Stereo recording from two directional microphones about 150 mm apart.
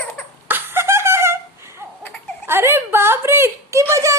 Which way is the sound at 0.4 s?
15° right (ahead or behind).